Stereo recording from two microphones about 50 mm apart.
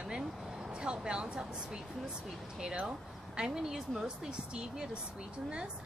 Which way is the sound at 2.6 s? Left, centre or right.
Centre.